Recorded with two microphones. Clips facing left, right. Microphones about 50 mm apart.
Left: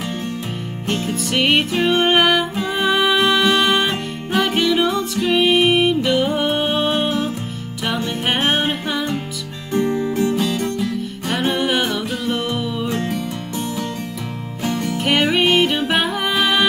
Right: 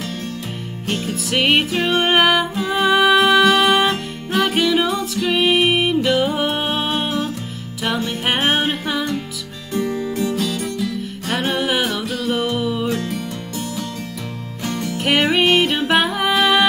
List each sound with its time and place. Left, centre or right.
1.0 s music: centre
8.3 s music: centre
9.7 s music: left
11.2 s music: centre
12.8 s music: left
14.6 s music: centre
15.0 s music: centre